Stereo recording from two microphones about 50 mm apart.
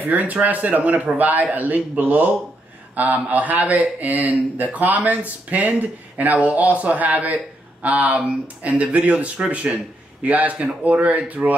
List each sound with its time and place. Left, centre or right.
0.0 s speech: right